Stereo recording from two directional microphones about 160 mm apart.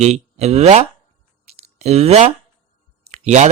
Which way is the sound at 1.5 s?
40° right (ahead or behind).